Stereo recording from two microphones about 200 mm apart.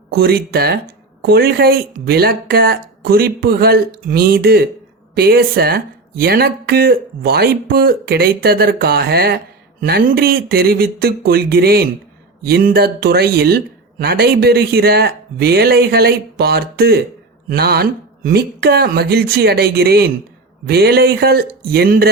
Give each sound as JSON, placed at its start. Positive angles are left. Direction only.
{"t": 0.1, "sound": "speech", "side_deg": -50}